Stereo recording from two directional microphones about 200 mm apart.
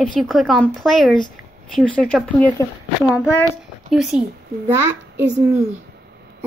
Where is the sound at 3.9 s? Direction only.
Centre (ahead or behind).